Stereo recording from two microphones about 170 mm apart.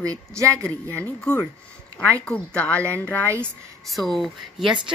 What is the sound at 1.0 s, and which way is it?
Speech, 5° left (ahead or behind).